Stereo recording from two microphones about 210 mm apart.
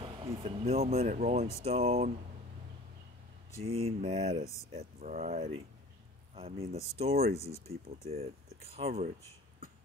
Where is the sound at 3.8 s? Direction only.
25° right (ahead or behind).